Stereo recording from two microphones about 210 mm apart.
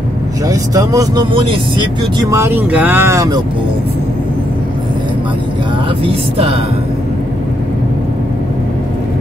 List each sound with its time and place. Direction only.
0.5 s speech: 15° right (ahead or behind)
2.3 s speech: 10° right (ahead or behind)